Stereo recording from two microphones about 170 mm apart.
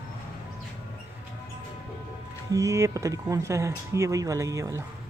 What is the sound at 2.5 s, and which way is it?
Speech, 20° right (ahead or behind).